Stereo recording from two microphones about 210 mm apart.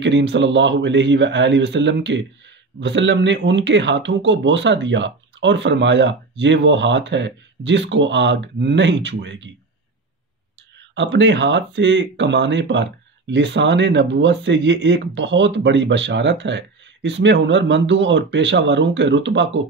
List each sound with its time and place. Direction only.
0.0 s speech: 60° right (ahead or behind)
11.0 s speech: 60° right (ahead or behind)